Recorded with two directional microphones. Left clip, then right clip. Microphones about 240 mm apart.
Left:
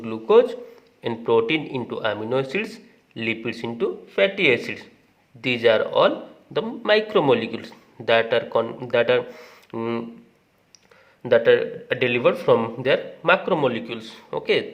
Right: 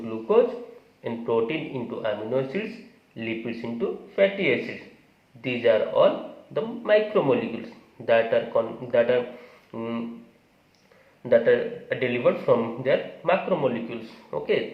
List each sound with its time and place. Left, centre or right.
0.0 s a man's voice: left
11.2 s speech: left